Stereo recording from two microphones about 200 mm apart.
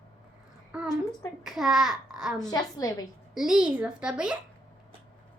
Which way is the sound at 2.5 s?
20° left (ahead or behind).